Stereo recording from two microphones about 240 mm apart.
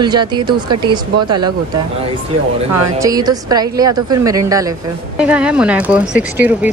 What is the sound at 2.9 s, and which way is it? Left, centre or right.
Speech, centre.